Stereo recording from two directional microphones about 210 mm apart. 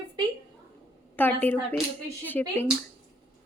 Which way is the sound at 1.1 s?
10° left (ahead or behind).